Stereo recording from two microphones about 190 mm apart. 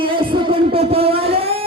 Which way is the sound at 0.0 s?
25° right (ahead or behind).